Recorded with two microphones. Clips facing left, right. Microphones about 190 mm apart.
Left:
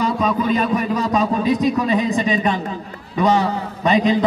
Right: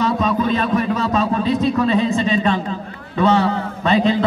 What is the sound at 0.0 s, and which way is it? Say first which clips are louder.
A man's voice: right 1 dB; 10° left (ahead or behind).